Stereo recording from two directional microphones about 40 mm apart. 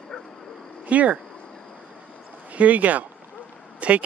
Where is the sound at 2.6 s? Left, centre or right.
Right.